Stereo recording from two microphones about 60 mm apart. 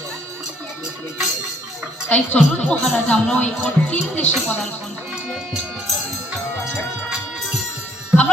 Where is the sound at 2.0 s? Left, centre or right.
Left.